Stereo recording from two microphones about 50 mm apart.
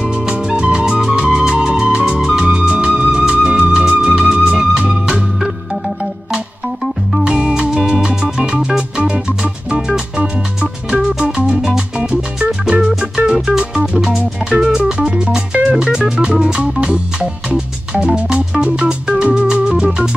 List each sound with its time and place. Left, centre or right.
0.0 s music: centre
7.2 s music: centre
19.4 s organ: centre